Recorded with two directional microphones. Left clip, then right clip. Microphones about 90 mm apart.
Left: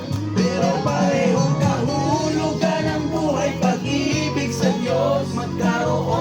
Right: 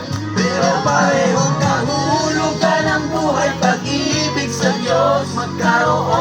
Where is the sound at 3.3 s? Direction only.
40° right (ahead or behind).